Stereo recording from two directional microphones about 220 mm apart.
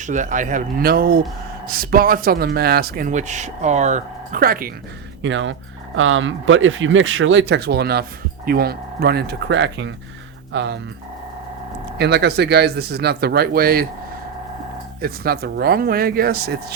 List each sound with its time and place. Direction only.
0.0 s speech: 35° right (ahead or behind)
5.2 s speech: 60° right (ahead or behind)
11.9 s speech: 50° right (ahead or behind)
15.0 s speech: 45° right (ahead or behind)